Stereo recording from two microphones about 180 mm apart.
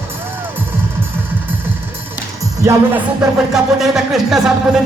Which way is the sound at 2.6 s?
15° right (ahead or behind).